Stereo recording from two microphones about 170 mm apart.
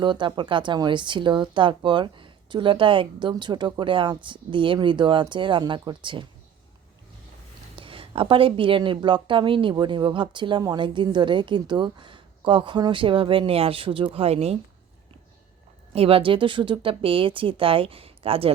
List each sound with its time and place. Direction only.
0.0 s speech: 25° right (ahead or behind)
7.8 s speech: 30° right (ahead or behind)
15.9 s speech: 35° right (ahead or behind)